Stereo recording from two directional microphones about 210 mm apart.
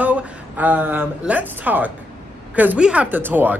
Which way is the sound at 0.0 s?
10° right (ahead or behind).